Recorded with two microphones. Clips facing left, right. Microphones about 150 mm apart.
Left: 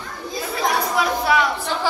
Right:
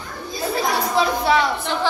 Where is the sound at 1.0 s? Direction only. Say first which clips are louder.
Right 3 dB; 30° right (ahead or behind).